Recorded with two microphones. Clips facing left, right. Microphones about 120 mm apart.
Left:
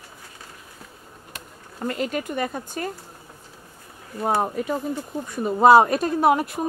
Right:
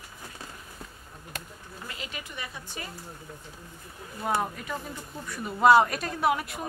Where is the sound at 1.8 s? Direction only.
50° left (ahead or behind).